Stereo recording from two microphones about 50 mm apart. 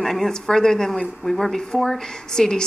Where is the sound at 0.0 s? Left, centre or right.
Centre.